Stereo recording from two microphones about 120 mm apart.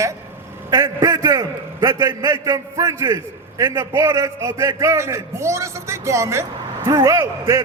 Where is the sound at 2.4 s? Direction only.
30° right (ahead or behind).